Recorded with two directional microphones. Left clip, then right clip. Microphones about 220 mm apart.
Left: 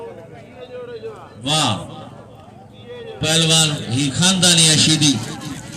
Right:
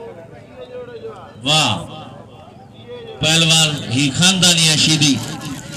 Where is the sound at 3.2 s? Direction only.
40° right (ahead or behind).